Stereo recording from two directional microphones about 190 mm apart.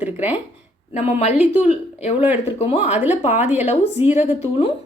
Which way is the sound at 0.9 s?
35° left (ahead or behind).